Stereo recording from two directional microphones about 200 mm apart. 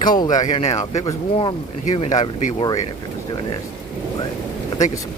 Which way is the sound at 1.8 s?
35° left (ahead or behind).